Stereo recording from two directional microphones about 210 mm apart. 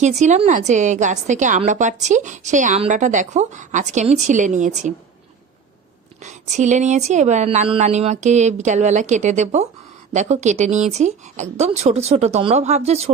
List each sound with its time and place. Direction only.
0.2 s a woman's voice: 35° right (ahead or behind)
6.2 s a woman's voice: 35° right (ahead or behind)